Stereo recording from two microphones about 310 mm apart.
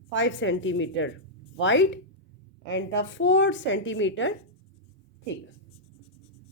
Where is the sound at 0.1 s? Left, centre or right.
Left.